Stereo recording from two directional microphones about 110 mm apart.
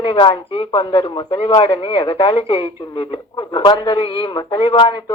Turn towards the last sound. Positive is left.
turn(degrees=45)  # may be behind; listen again after turning